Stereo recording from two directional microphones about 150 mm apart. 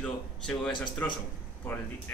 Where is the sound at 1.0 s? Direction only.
10° left (ahead or behind).